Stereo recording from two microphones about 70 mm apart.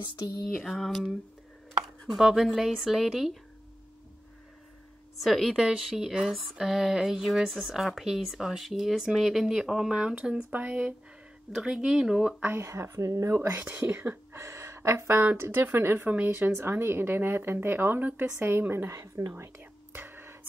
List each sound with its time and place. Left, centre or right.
0.4 s speech: centre
2.0 s speech: centre
5.2 s speech: centre; by 10.8 s right
11.5 s speech: centre
12.5 s a woman's voice: right
13.7 s speech: right
14.3 s a sound: right
15.3 s a woman's voice: right
18.9 s a woman's voice: right
19.3 s whispering: right